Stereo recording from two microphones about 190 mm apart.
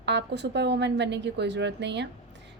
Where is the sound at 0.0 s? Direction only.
65° right (ahead or behind).